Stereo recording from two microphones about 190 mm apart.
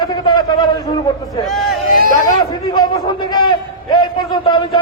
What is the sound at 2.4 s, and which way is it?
A man's voice, 20° left (ahead or behind).